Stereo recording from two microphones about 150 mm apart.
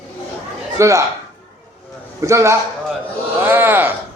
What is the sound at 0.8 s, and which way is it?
Speech, 20° right (ahead or behind).